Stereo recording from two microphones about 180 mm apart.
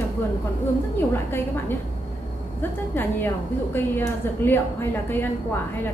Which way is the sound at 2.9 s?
10° left (ahead or behind).